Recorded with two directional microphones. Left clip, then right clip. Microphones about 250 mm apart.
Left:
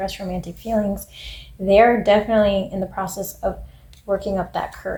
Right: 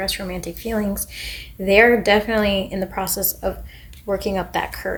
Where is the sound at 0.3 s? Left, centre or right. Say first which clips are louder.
Left 1 dB; right.